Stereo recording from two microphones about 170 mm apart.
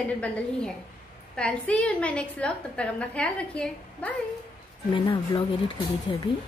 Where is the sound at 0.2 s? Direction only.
5° left (ahead or behind).